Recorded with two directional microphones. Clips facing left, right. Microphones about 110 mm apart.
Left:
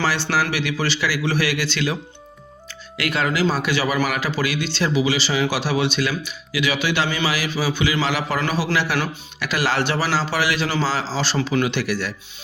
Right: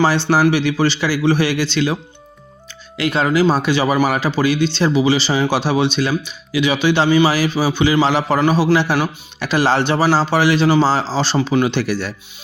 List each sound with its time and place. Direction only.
0.5 s speech: 30° right (ahead or behind)
3.0 s speech: 25° right (ahead or behind)